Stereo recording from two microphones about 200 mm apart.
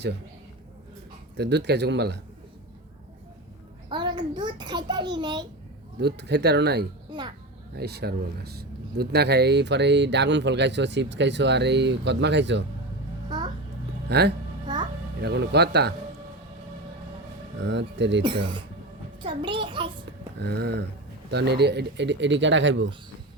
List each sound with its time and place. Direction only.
1.4 s speech: 55° right (ahead or behind)
3.8 s a sound: 25° right (ahead or behind)
4.4 s a child's voice: 20° right (ahead or behind)
6.0 s speech: 55° right (ahead or behind)
7.1 s a child's voice: 20° right (ahead or behind)
7.8 s speech: 55° right (ahead or behind)
13.2 s music: 20° right (ahead or behind)
14.1 s speech: 55° right (ahead or behind)
14.7 s music: 20° right (ahead or behind)
15.2 s speech: 55° right (ahead or behind)
17.6 s speech: 65° right (ahead or behind)
19.2 s a child's voice: 25° right (ahead or behind)
20.4 s speech: 55° right (ahead or behind)